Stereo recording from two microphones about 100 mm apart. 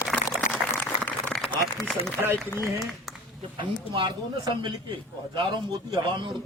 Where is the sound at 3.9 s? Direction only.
50° right (ahead or behind).